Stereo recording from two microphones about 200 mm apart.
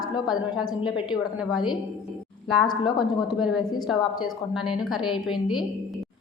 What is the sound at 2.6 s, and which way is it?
Speech, 25° left (ahead or behind).